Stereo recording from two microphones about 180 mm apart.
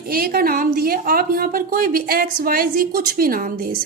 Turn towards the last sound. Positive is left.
turn(degrees=-55)  # may be behind; listen again after turning